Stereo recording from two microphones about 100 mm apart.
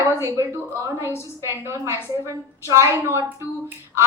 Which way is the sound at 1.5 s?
25° right (ahead or behind).